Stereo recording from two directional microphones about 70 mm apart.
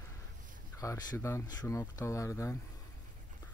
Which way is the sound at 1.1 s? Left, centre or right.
Left.